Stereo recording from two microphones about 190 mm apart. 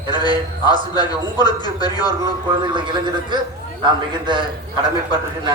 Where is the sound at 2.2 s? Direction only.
25° right (ahead or behind).